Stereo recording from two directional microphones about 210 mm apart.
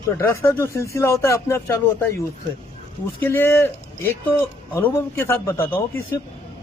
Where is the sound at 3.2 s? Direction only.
10° left (ahead or behind).